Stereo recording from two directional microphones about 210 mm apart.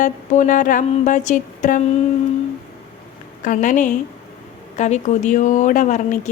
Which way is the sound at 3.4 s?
40° left (ahead or behind).